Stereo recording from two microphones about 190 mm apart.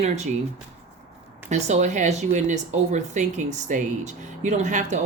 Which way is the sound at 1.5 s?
35° right (ahead or behind).